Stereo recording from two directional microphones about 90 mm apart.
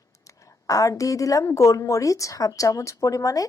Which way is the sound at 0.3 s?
40° left (ahead or behind).